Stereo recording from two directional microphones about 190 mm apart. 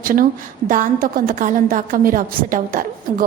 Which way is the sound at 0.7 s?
45° right (ahead or behind).